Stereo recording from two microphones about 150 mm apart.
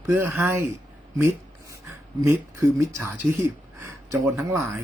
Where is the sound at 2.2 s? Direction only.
20° right (ahead or behind).